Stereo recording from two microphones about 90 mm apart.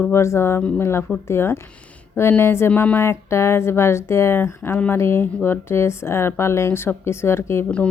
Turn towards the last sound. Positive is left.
turn(degrees=30)  # may be behind; listen again after turning